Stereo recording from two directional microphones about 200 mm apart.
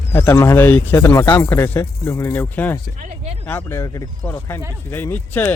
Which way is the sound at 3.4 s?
10° left (ahead or behind).